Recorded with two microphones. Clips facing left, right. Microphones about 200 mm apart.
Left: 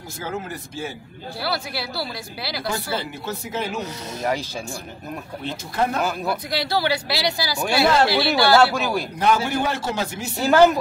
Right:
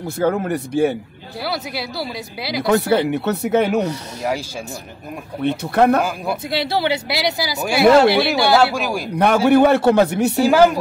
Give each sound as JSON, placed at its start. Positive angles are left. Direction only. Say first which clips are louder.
{"t": 0.2, "sound": "a man's voice", "louder": "right 11 dB", "side_deg": -60}
{"t": 1.4, "sound": "speech", "louder": "right 3 dB", "side_deg": -20}
{"t": 2.6, "sound": "speech", "louder": "right 13 dB", "side_deg": -65}
{"t": 5.4, "sound": "a man's voice", "louder": "right 9 dB", "side_deg": -60}
{"t": 6.5, "sound": "speech", "louder": "right 4 dB", "side_deg": -25}
{"t": 9.2, "sound": "a man's voice", "louder": "right 9 dB", "side_deg": -60}
{"t": 10.4, "sound": "speech", "louder": "right 1 dB", "side_deg": -10}